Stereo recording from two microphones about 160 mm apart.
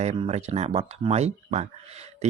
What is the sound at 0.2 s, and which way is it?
Speech, 40° right (ahead or behind).